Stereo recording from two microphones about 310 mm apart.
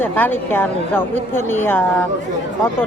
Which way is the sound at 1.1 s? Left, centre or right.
Right.